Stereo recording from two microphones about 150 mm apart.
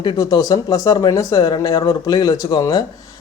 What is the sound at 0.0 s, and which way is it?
Speech, 30° left (ahead or behind).